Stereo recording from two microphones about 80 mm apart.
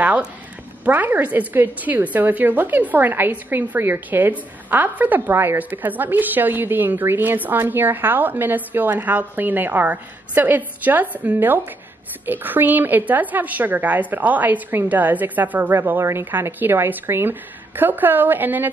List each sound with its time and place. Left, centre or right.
0.8 s a woman's voice: right